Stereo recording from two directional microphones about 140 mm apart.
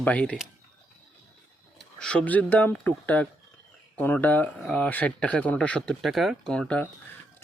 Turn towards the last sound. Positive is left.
turn(degrees=5)  # may be behind; listen again after turning